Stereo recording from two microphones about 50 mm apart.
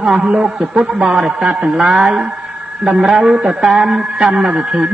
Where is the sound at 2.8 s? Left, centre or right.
Centre.